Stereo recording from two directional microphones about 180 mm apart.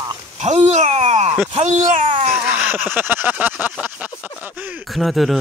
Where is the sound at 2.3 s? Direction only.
10° right (ahead or behind).